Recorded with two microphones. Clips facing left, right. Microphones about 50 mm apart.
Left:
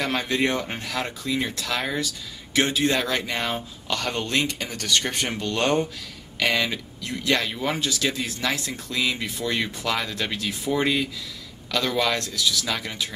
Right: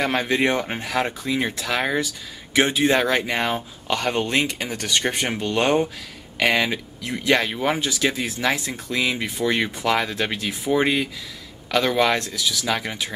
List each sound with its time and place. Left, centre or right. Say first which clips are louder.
0.0 s speech: right 3 dB; centre